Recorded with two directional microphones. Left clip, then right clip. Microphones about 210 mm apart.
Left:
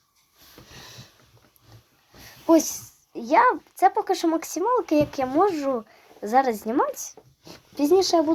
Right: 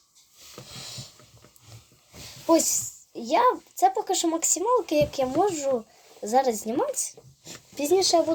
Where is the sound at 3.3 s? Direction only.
25° left (ahead or behind).